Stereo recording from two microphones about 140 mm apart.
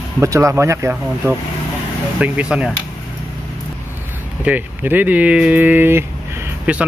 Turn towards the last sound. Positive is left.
turn(degrees=-10)  # may be behind; listen again after turning